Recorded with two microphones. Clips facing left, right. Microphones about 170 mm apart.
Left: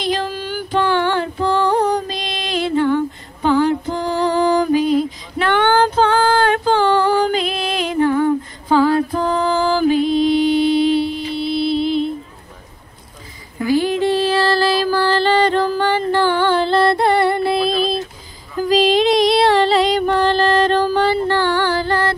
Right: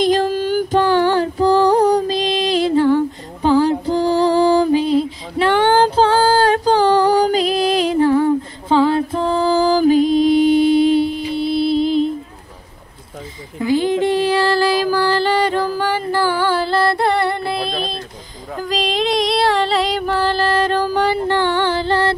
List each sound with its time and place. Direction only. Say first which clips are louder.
0.0 s female singing: right 6 dB; 45° right (ahead or behind)
3.4 s music: right 1 dB; 35° right (ahead or behind)
13.6 s music: even; 20° right (ahead or behind)